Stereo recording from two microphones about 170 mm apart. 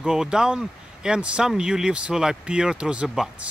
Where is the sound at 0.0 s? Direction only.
5° right (ahead or behind).